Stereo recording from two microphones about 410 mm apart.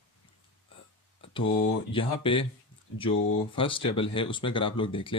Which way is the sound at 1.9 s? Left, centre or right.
Centre.